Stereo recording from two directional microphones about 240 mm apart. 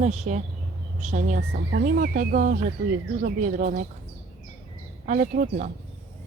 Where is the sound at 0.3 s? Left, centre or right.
Right.